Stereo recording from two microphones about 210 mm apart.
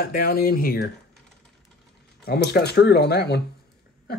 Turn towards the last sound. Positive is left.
turn(degrees=50)  # may be behind; listen again after turning